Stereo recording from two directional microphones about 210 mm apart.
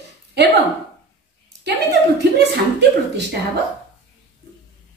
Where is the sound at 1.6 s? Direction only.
55° right (ahead or behind).